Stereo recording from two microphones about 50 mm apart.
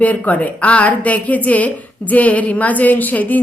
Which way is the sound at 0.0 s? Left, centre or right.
Left.